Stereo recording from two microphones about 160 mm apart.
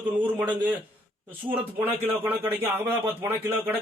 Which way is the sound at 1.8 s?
10° right (ahead or behind).